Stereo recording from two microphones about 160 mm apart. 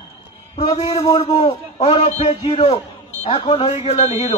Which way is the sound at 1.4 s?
40° left (ahead or behind).